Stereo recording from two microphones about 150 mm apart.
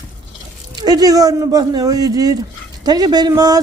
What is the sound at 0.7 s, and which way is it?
Speech, 25° right (ahead or behind).